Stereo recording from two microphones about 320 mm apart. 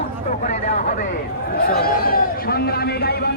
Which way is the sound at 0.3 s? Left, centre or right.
Left.